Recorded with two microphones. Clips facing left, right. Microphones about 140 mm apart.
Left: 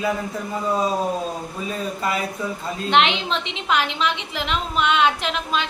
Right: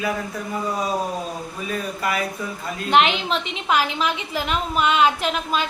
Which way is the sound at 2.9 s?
5° right (ahead or behind).